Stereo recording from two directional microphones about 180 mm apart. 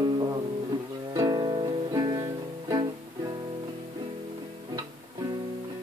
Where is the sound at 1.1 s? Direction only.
20° right (ahead or behind).